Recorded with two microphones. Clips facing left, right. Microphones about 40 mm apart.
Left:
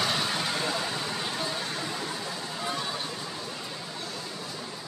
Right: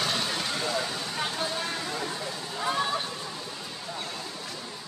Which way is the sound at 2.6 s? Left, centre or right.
Right.